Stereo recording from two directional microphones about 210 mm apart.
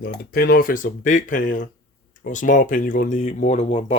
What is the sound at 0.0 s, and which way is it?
Speech, 45° left (ahead or behind).